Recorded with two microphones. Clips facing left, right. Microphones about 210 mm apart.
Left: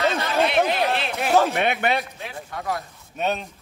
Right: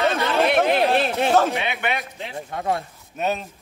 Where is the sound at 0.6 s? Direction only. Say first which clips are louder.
Right 4 dB; 30° right (ahead or behind).